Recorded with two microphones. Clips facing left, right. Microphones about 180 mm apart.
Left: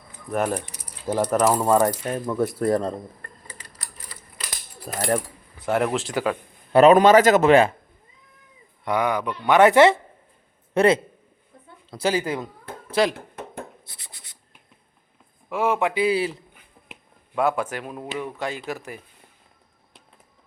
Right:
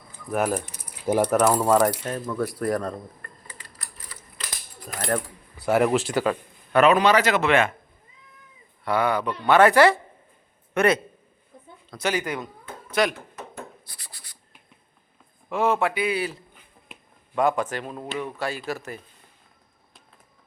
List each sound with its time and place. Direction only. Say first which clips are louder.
0.3 s speech: even; 5° right (ahead or behind)
1.0 s speech: right 2 dB; 15° right (ahead or behind)
1.4 s speech: even; 5° left (ahead or behind)
2.2 s a woman's voice: left 4 dB; 25° left (ahead or behind)
4.9 s speech: left 3 dB; 10° left (ahead or behind)
5.6 s speech: right 2 dB; centre (ahead or behind)
6.7 s a man's voice: left 5 dB; 40° left (ahead or behind)
8.8 s a woman's voice: even; 15° left (ahead or behind)
13.1 s a sound: left 3 dB; 55° left (ahead or behind)
13.8 s writing: even; 20° left (ahead or behind)
15.4 s speech: even; 10° left (ahead or behind)
16.0 s a woman's voice: left 4 dB; 30° left (ahead or behind)
17.3 s speech: even; 5° left (ahead or behind)